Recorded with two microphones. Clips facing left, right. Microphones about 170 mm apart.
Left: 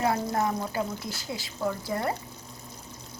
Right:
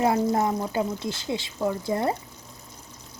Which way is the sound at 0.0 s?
20° right (ahead or behind).